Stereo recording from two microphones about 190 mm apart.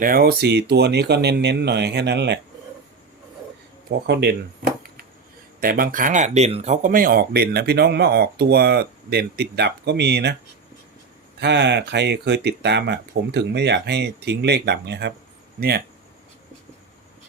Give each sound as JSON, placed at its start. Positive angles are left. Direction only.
{"t": 0.0, "sound": "speech", "side_deg": -50}
{"t": 3.8, "sound": "speech", "side_deg": -60}
{"t": 11.3, "sound": "speech", "side_deg": -65}